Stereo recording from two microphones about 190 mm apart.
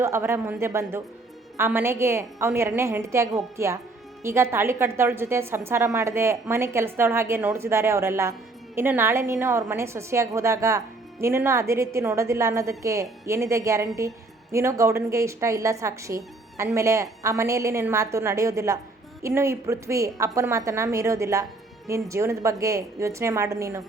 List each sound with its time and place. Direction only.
0.0 s a woman's voice: 15° right (ahead or behind)